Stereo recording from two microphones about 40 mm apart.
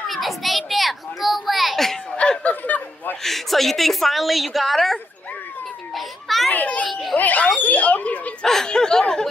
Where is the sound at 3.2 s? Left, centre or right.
Centre.